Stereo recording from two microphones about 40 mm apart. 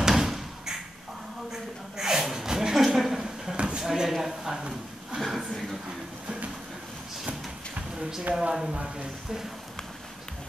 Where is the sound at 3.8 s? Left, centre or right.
Centre.